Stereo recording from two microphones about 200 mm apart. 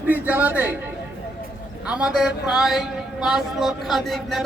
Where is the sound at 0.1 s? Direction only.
10° right (ahead or behind).